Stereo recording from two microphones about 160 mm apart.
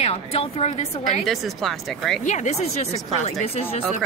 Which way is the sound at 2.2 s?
50° left (ahead or behind).